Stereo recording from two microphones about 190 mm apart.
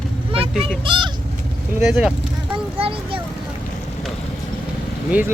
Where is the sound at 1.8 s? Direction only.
5° right (ahead or behind).